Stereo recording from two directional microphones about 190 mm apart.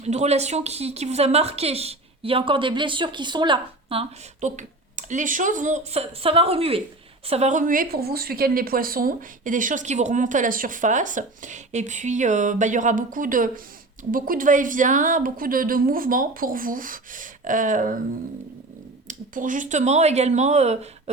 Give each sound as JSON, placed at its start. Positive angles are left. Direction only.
{"t": 0.0, "sound": "a woman's voice", "side_deg": -35}
{"t": 19.0, "sound": "a woman's voice", "side_deg": -45}